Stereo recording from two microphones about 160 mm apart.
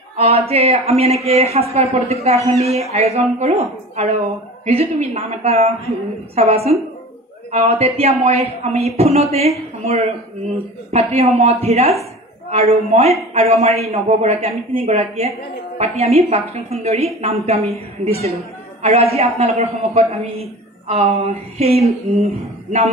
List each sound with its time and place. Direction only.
0.2 s a woman's voice: 40° right (ahead or behind)